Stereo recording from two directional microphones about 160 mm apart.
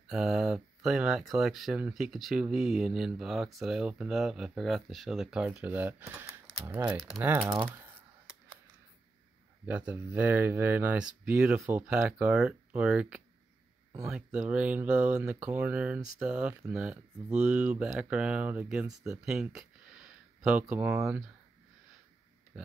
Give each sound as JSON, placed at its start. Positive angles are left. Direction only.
{"t": 0.1, "sound": "speech", "side_deg": -5}
{"t": 9.7, "sound": "speech", "side_deg": -10}
{"t": 20.6, "sound": "speech", "side_deg": -15}